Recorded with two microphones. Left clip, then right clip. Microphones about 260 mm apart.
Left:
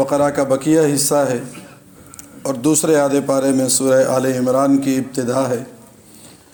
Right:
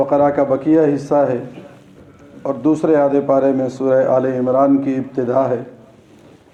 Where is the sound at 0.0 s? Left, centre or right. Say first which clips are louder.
Right 2 dB; left.